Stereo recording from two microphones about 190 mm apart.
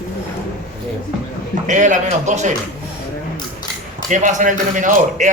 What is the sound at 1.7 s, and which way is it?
Speech, 40° right (ahead or behind).